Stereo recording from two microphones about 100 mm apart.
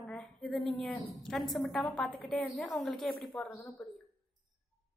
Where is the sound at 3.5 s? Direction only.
30° left (ahead or behind).